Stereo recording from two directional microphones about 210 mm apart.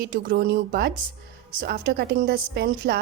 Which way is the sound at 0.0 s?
40° right (ahead or behind).